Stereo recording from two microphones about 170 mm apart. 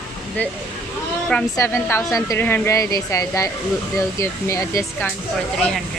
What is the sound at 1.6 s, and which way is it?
Speech, 15° left (ahead or behind).